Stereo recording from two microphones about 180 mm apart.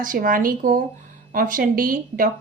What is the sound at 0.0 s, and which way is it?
A woman's voice, 50° right (ahead or behind).